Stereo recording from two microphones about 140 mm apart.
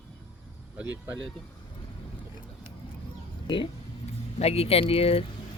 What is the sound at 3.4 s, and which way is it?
Speech, 35° left (ahead or behind).